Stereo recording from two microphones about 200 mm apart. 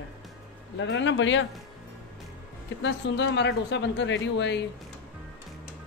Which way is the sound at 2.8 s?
60° left (ahead or behind).